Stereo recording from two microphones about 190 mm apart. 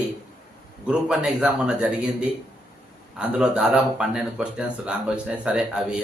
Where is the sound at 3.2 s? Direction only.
5° right (ahead or behind).